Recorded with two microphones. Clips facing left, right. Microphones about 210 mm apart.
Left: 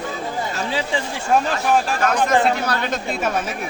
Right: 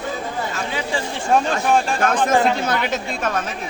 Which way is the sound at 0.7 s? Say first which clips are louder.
Left 1 dB; 30° left (ahead or behind).